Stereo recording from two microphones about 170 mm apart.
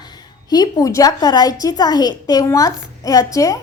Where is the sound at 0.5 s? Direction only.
20° left (ahead or behind).